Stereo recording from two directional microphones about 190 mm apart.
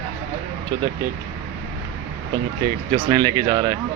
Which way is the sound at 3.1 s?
25° right (ahead or behind).